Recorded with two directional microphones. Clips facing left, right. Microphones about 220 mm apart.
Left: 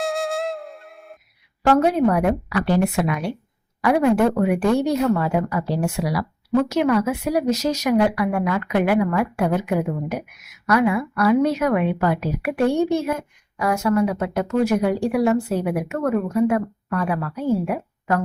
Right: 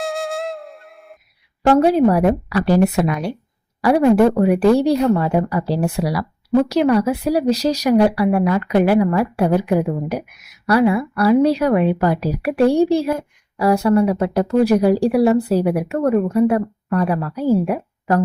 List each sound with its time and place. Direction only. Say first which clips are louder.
0.0 s music: even; centre (ahead or behind)
1.7 s speech: right 4 dB; 30° right (ahead or behind)